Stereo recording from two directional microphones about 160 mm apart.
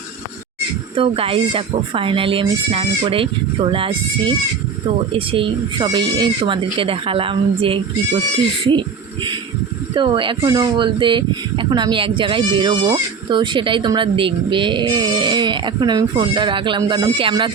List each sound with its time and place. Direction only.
0.9 s speech: 35° right (ahead or behind)
9.9 s speech: 30° right (ahead or behind)